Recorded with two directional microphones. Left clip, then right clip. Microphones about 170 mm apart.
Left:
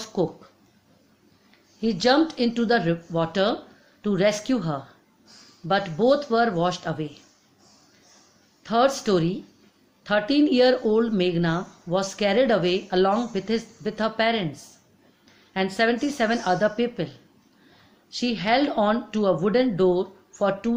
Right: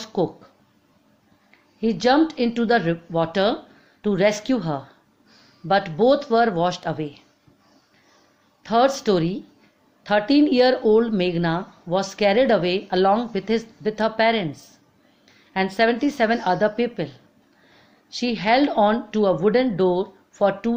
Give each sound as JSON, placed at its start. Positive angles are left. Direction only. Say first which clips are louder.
{"t": 0.0, "sound": "a sound", "louder": "right 2 dB", "side_deg": -30}
{"t": 1.8, "sound": "speech", "louder": "right 2 dB", "side_deg": -35}
{"t": 8.6, "sound": "speech", "louder": "right 3 dB", "side_deg": -35}